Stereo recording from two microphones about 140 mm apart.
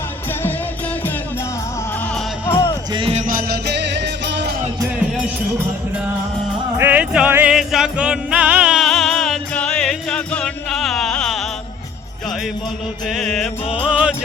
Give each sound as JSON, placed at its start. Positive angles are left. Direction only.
{"t": 2.5, "sound": "music", "side_deg": 20}
{"t": 2.9, "sound": "music", "side_deg": -40}
{"t": 4.9, "sound": "music", "side_deg": -5}
{"t": 6.7, "sound": "music", "side_deg": -10}
{"t": 13.1, "sound": "music", "side_deg": 0}